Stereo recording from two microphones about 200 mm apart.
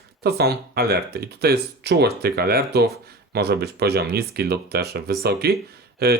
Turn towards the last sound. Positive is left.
turn(degrees=-50)  # may be behind; listen again after turning